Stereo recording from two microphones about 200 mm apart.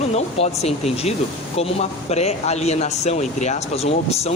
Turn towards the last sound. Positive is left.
turn(degrees=30)  # may be behind; listen again after turning